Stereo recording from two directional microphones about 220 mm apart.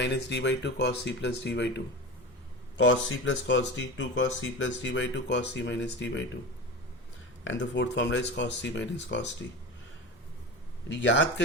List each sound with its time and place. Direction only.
0.0 s speech: 50° left (ahead or behind)
7.4 s speech: 55° left (ahead or behind)
10.8 s speech: 55° left (ahead or behind)